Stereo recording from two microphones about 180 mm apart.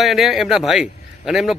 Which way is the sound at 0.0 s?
Centre (ahead or behind).